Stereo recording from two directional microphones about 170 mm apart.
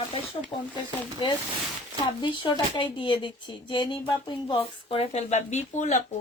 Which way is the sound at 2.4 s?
30° left (ahead or behind).